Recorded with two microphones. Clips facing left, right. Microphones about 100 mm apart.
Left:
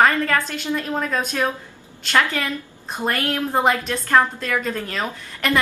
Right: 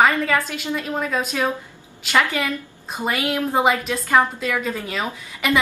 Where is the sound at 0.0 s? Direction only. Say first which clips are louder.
Even; 5° right (ahead or behind).